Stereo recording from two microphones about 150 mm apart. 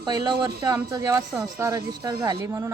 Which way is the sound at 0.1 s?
30° right (ahead or behind).